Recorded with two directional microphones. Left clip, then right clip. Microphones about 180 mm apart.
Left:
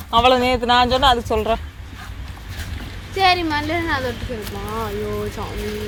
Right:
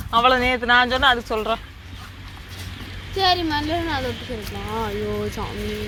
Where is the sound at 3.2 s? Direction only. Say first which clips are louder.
Left 3 dB; 55° right (ahead or behind).